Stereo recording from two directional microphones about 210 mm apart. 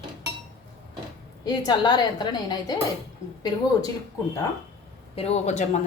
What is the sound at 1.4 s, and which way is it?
A woman's voice, 20° left (ahead or behind).